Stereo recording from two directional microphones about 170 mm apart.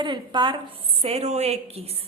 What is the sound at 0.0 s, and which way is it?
A woman's voice, 25° right (ahead or behind).